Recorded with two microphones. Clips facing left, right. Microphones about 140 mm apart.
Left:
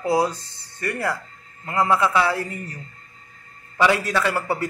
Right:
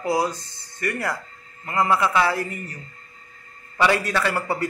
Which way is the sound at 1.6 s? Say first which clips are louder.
Left 1 dB; 15° left (ahead or behind).